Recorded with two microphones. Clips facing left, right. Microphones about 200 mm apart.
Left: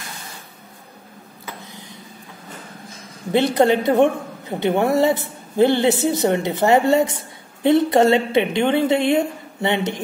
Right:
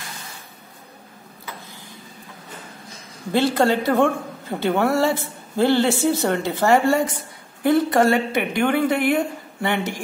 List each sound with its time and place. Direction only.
3.3 s a woman's voice: 20° left (ahead or behind)